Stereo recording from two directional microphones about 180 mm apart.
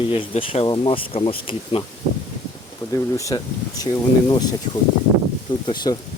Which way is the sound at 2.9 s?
20° left (ahead or behind).